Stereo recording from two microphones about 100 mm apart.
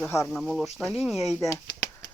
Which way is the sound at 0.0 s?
25° left (ahead or behind).